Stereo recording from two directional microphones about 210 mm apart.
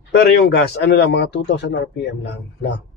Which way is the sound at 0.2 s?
50° left (ahead or behind).